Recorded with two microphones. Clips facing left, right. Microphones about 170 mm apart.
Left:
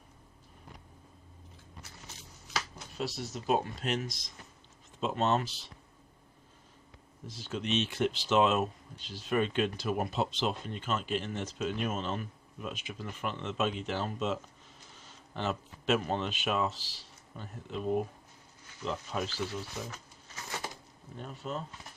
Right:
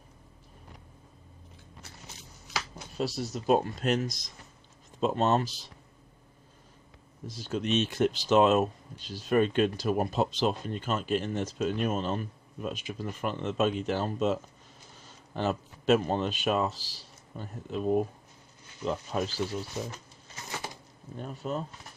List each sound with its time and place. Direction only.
3.0 s speech: 35° right (ahead or behind)
7.3 s speech: 40° right (ahead or behind)
15.4 s speech: 40° right (ahead or behind)
21.2 s speech: 45° right (ahead or behind)